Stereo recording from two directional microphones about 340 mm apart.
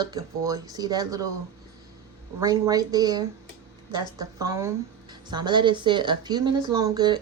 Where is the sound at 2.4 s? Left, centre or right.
Centre.